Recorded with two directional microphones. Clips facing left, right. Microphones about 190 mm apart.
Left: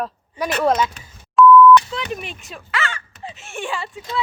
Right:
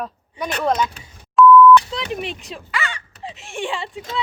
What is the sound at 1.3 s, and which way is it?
Beep, centre (ahead or behind).